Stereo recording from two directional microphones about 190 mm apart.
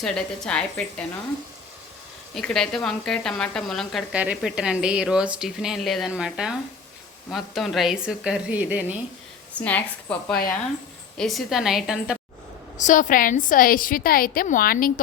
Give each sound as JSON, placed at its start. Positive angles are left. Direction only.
{"t": 0.0, "sound": "speech", "side_deg": 5}
{"t": 2.3, "sound": "speech", "side_deg": 5}
{"t": 9.6, "sound": "a woman's voice", "side_deg": 10}
{"t": 12.7, "sound": "a woman's voice", "side_deg": 40}